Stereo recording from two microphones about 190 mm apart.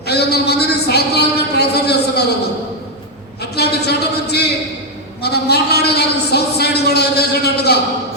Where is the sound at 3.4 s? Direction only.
60° left (ahead or behind).